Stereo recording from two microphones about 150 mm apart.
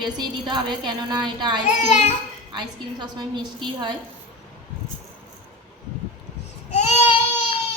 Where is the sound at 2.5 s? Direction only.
30° right (ahead or behind).